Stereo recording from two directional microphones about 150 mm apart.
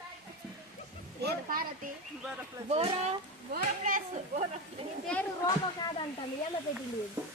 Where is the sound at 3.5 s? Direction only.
60° right (ahead or behind).